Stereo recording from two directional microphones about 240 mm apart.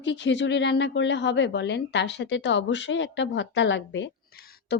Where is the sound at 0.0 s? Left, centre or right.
Left.